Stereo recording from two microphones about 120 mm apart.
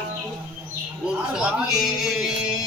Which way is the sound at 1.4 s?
5° right (ahead or behind).